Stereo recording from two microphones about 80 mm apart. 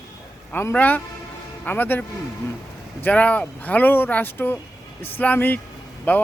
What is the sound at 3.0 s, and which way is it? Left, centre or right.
Speech, centre.